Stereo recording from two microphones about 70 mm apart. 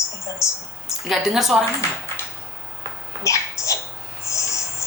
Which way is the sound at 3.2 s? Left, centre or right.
Left.